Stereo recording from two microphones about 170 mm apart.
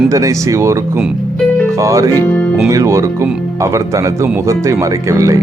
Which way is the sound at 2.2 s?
10° left (ahead or behind).